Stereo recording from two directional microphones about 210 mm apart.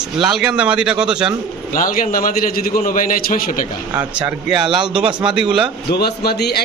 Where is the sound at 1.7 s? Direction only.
40° left (ahead or behind).